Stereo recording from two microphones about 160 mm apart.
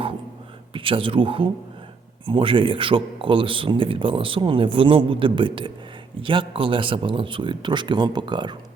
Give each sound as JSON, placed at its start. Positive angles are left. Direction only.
{"t": 0.7, "sound": "speech", "side_deg": -35}